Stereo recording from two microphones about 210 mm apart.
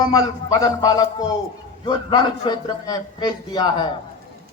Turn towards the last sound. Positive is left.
turn(degrees=20)  # may be behind; listen again after turning